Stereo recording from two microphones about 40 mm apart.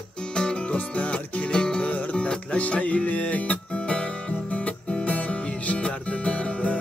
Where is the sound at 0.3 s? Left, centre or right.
Left.